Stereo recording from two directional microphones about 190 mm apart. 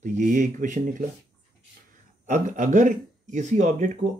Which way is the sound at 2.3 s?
40° right (ahead or behind).